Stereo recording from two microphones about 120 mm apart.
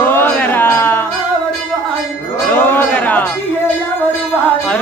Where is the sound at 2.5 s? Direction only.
15° left (ahead or behind).